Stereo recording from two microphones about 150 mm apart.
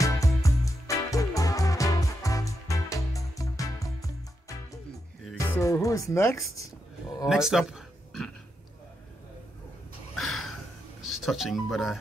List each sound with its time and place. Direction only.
0.0 s music: 20° left (ahead or behind)
5.2 s music: 10° left (ahead or behind)
5.6 s speech: 20° left (ahead or behind)
7.2 s a sound: 5° right (ahead or behind)
10.1 s a sound: centre (ahead or behind)
11.0 s speech: centre (ahead or behind)